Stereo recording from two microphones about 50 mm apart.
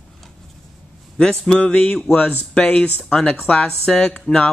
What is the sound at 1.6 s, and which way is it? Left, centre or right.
Speech, left.